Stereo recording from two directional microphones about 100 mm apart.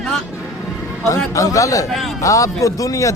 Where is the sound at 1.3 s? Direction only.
35° left (ahead or behind).